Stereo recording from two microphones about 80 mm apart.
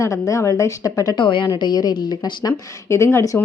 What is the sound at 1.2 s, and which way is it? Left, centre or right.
Speech, left.